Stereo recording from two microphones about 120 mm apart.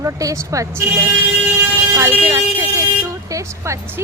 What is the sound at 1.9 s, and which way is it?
A woman's voice, 25° right (ahead or behind).